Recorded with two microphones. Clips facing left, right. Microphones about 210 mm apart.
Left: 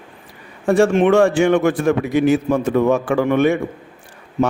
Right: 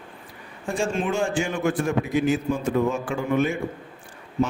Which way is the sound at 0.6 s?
70° left (ahead or behind).